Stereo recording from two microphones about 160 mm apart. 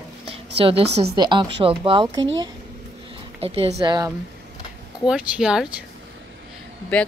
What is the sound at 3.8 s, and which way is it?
Speech, 25° right (ahead or behind).